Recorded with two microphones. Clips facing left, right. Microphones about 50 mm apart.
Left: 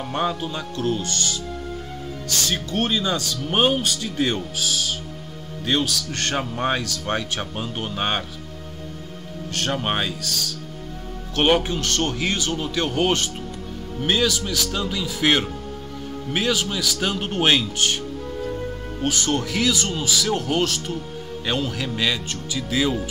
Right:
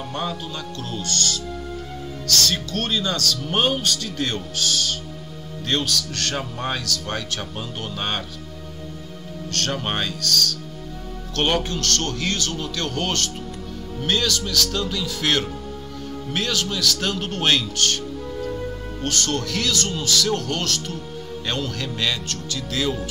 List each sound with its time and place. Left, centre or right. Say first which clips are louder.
0.1 s speech: left 5 dB; centre
6.1 s speech: left 2 dB; left
9.5 s speech: left 1 dB; centre
18.4 s music: even; centre
19.0 s speech: left 2 dB; centre